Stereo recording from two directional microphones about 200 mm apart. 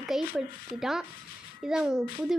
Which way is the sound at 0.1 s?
Centre (ahead or behind).